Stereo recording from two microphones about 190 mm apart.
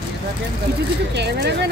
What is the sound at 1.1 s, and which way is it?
Speech, 65° right (ahead or behind).